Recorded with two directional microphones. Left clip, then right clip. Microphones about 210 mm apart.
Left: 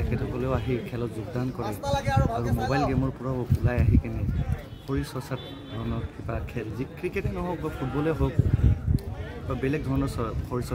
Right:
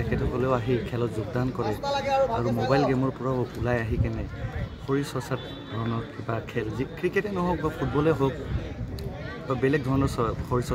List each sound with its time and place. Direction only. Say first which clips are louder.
0.1 s speech: right 4 dB; centre (ahead or behind)
1.6 s a man's voice: right 1 dB; 50° left (ahead or behind)
2.9 s speech: right 3 dB; centre (ahead or behind)
4.8 s speech: right 4 dB; centre (ahead or behind)
9.5 s speech: right 4 dB; centre (ahead or behind)